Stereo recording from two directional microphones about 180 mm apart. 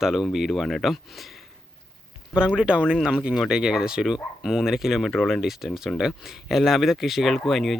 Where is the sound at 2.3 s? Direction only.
5° right (ahead or behind).